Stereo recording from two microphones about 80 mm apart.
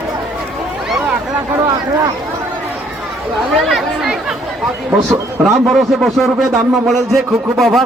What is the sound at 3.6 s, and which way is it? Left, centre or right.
Speech, centre.